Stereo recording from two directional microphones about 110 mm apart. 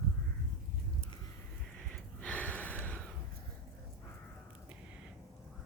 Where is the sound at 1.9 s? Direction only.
10° left (ahead or behind).